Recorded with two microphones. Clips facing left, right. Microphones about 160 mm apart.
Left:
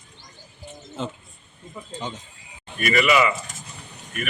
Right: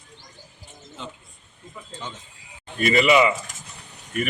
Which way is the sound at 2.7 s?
25° right (ahead or behind).